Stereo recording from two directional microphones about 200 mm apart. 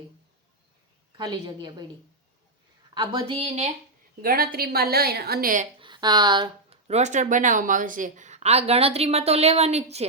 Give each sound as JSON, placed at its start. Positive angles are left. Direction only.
{"t": 1.1, "sound": "speech", "side_deg": -20}
{"t": 2.9, "sound": "speech", "side_deg": -20}
{"t": 4.2, "sound": "speech", "side_deg": -45}
{"t": 5.8, "sound": "speech", "side_deg": -20}